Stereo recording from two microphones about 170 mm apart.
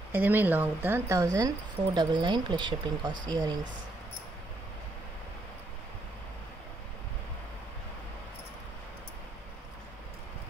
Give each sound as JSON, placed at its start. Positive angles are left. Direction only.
{"t": 0.1, "sound": "a woman's voice", "side_deg": -10}